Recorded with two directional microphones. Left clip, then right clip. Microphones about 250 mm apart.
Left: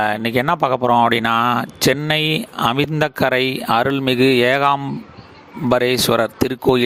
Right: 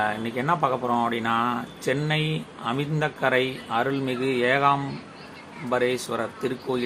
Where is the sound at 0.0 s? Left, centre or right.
Left.